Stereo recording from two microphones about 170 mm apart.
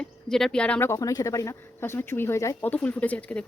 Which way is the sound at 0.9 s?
20° left (ahead or behind).